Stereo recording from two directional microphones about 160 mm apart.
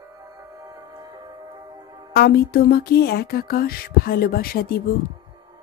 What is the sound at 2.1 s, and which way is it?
Music, 75° left (ahead or behind).